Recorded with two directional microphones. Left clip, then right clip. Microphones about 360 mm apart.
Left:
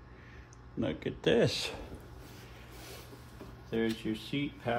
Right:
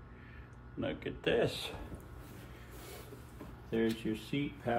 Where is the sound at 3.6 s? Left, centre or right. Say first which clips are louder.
Left 1 dB; centre.